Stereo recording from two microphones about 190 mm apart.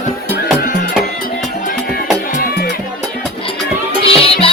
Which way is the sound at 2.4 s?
55° left (ahead or behind).